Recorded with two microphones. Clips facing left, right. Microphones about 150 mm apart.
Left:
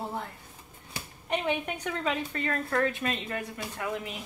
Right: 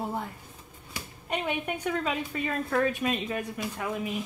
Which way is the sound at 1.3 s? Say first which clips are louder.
Left 1 dB; 10° right (ahead or behind).